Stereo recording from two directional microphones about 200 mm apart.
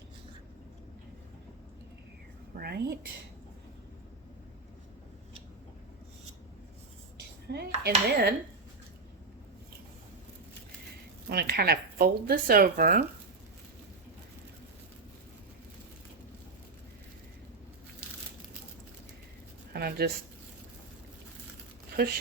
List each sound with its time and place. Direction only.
2.6 s speech: 55° right (ahead or behind)
7.5 s dishes: 55° right (ahead or behind)
7.9 s speech: 55° right (ahead or behind)
11.3 s speech: 50° right (ahead or behind)
19.7 s speech: 50° right (ahead or behind)
22.0 s speech: 50° right (ahead or behind)